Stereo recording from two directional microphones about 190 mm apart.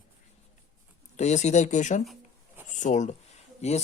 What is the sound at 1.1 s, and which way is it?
Speech, 35° left (ahead or behind).